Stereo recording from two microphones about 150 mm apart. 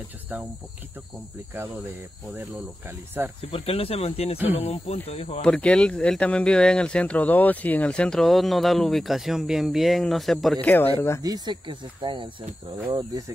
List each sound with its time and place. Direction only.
3.3 s speech: 40° left (ahead or behind)
5.4 s speech: 5° left (ahead or behind)
10.7 s speech: 15° left (ahead or behind)
11.2 s speech: 25° right (ahead or behind)